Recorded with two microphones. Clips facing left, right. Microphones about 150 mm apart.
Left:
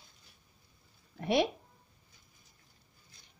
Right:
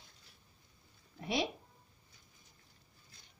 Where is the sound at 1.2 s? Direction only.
60° left (ahead or behind).